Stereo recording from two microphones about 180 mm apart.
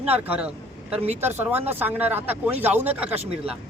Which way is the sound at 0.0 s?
10° right (ahead or behind).